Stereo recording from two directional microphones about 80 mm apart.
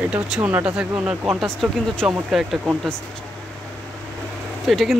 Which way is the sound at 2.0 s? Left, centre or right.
Centre.